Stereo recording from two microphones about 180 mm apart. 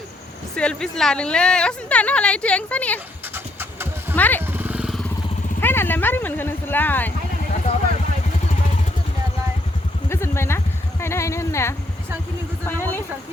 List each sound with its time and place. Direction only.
0.5 s a woman's voice: 5° left (ahead or behind)
3.3 s horse: 10° right (ahead or behind)
4.1 s speech: 10° left (ahead or behind)
4.5 s vehicle: 10° right (ahead or behind)
5.5 s a sound: 10° left (ahead or behind)
10.1 s a sound: 15° left (ahead or behind)
11.0 s speech: 15° left (ahead or behind)